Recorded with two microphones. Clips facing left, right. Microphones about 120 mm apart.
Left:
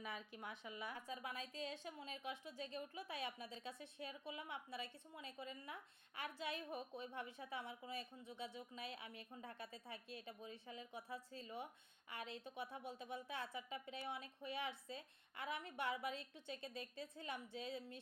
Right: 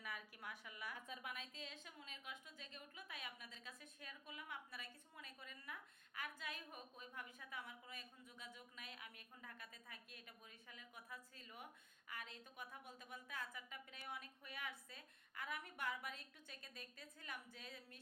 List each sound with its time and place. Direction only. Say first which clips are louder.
0.0 s a woman's voice: left 3 dB; 25° left (ahead or behind)